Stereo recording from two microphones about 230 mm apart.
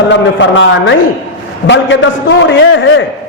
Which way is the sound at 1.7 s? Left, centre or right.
Left.